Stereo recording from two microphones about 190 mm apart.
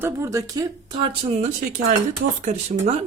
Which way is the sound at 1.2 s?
35° right (ahead or behind).